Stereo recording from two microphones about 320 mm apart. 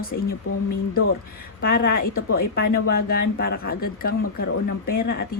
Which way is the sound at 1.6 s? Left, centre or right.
Left.